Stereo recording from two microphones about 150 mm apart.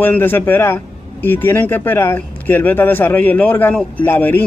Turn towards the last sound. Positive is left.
turn(degrees=15)  # may be behind; listen again after turning